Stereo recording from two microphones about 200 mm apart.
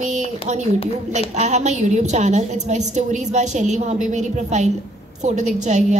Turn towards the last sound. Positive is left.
turn(degrees=-35)  # may be behind; listen again after turning